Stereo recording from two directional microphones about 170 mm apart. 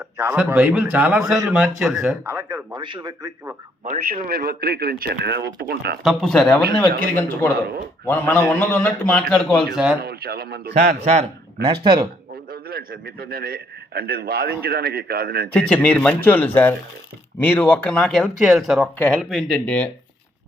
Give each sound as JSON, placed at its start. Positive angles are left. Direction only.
{"t": 0.2, "sound": "a man's voice", "side_deg": -15}
{"t": 2.2, "sound": "a man's voice", "side_deg": -15}
{"t": 2.8, "sound": "a man's voice", "side_deg": -25}
{"t": 3.8, "sound": "a man's voice", "side_deg": -55}
{"t": 6.0, "sound": "a man's voice", "side_deg": 0}
{"t": 10.0, "sound": "a man's voice", "side_deg": -65}
{"t": 10.8, "sound": "speech", "side_deg": -40}
{"t": 12.5, "sound": "a man's voice", "side_deg": -65}
{"t": 15.5, "sound": "a man's voice", "side_deg": 5}